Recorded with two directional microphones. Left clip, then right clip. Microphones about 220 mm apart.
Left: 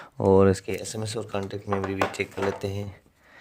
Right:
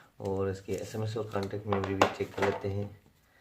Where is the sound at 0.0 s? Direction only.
50° left (ahead or behind).